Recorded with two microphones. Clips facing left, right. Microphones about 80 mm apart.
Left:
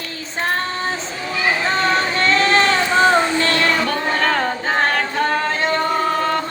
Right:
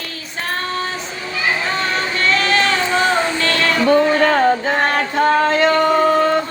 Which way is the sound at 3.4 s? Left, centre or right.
Left.